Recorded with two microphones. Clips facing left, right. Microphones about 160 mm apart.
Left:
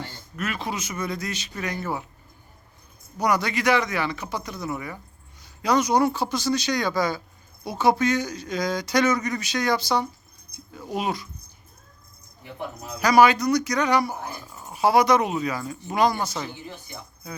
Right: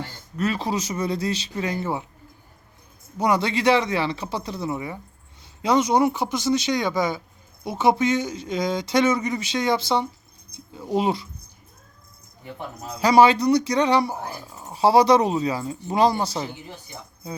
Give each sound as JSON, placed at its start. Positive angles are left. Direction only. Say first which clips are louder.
{"t": 0.3, "sound": "speech", "louder": "right 5 dB", "side_deg": -35}
{"t": 3.2, "sound": "speech", "louder": "right 2 dB", "side_deg": -25}
{"t": 13.0, "sound": "speech", "louder": "right 2 dB", "side_deg": -25}